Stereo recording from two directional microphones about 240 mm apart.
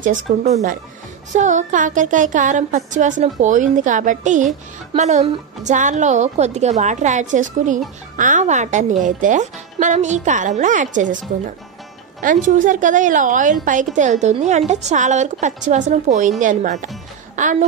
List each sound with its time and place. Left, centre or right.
0.0 s a woman's voice: right